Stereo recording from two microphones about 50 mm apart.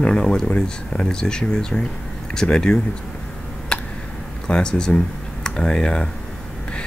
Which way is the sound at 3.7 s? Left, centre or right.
Centre.